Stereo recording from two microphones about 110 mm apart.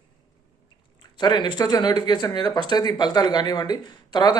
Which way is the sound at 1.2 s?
40° left (ahead or behind).